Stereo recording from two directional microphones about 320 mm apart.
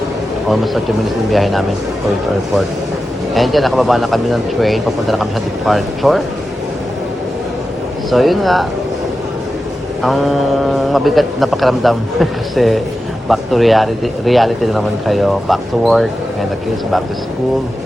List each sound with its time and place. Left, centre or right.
0.4 s speech: centre
3.3 s speech: centre
8.1 s speech: centre
10.0 s speech: centre